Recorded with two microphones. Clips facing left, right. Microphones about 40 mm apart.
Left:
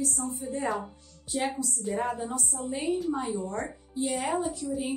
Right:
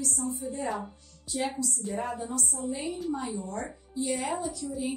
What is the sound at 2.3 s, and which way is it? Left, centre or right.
A woman's voice, left.